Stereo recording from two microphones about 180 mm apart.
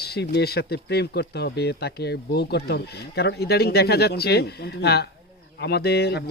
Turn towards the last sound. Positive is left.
turn(degrees=65)  # may be behind; listen again after turning